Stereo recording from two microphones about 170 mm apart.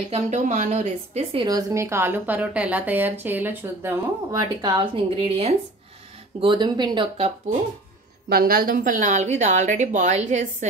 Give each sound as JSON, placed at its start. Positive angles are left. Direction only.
{"t": 0.1, "sound": "speech", "side_deg": -45}
{"t": 8.3, "sound": "speech", "side_deg": -60}